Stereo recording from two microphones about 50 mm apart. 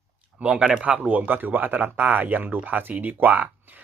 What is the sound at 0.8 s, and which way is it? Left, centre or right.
Speech, centre.